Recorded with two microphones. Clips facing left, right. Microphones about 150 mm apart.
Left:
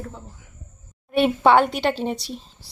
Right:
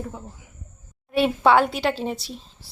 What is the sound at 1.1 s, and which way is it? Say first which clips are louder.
Speech: left 1 dB; centre (ahead or behind).